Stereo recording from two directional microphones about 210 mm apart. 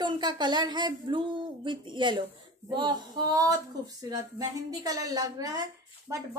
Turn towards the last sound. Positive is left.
turn(degrees=-15)  # may be behind; listen again after turning